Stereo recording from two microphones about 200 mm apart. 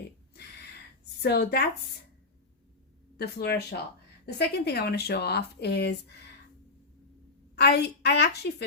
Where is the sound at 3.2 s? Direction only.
55° left (ahead or behind).